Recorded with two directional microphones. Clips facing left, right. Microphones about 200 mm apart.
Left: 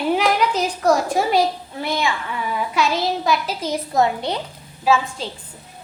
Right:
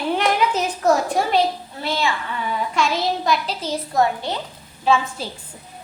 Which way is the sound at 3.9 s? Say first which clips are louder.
Left 1 dB; 20° left (ahead or behind).